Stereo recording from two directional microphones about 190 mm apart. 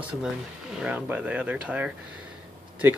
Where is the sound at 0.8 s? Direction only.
10° right (ahead or behind).